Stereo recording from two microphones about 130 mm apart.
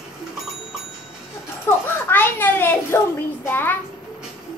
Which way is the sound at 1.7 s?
20° left (ahead or behind).